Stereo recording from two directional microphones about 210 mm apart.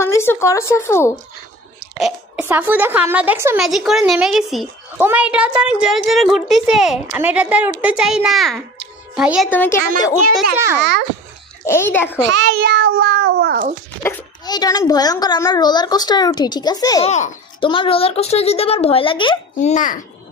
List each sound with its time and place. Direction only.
0.0 s speech: 10° left (ahead or behind)
2.4 s a woman's voice: 10° right (ahead or behind)
9.5 s a woman's voice: 10° left (ahead or behind)
10.3 s a woman's voice: 10° right (ahead or behind)
10.8 s cat: 55° right (ahead or behind)
11.6 s a woman's voice: 10° left (ahead or behind)
12.3 s cat: 55° right (ahead or behind)
14.0 s a child's voice: 15° left (ahead or behind)
17.0 s a child's voice: 30° left (ahead or behind)
19.7 s a child's voice: 40° left (ahead or behind)